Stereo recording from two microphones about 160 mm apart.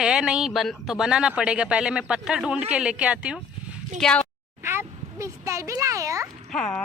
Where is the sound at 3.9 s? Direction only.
5° left (ahead or behind).